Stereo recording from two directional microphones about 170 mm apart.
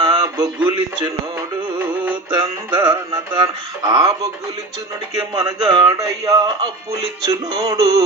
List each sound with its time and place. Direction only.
0.0 s a sound: 25° right (ahead or behind)
2.7 s speech: 25° right (ahead or behind)
5.3 s speech: 25° right (ahead or behind)